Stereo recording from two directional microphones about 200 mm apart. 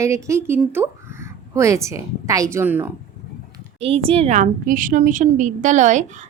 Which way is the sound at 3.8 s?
30° right (ahead or behind).